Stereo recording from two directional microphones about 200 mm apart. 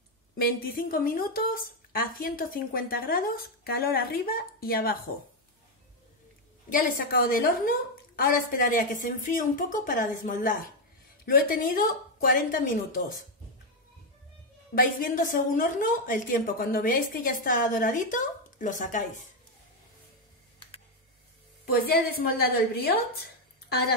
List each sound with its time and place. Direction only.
0.4 s a woman's voice: 50° left (ahead or behind)
6.7 s a woman's voice: 45° left (ahead or behind)
14.8 s a woman's voice: 45° left (ahead or behind)
21.7 s a woman's voice: 50° left (ahead or behind)